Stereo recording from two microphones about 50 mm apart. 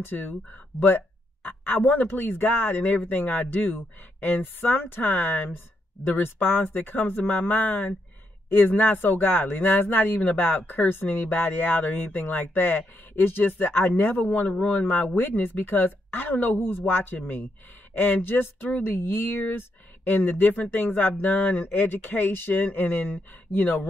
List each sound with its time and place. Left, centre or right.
0.0 s speech: left